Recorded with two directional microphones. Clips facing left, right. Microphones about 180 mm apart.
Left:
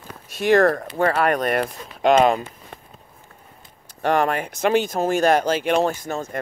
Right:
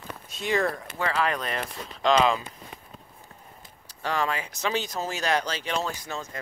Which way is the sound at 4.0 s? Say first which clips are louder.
Left 8 dB; 60° left (ahead or behind).